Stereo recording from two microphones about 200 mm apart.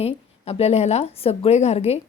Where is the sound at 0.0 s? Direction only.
30° left (ahead or behind).